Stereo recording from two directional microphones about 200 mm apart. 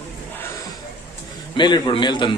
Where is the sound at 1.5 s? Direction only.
25° left (ahead or behind).